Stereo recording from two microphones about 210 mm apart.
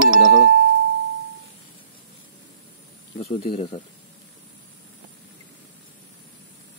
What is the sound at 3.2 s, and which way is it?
Speech, 30° left (ahead or behind).